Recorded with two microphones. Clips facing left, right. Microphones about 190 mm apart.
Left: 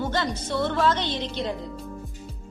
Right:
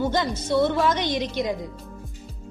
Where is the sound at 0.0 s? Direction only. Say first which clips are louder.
Right 3 dB; 10° right (ahead or behind).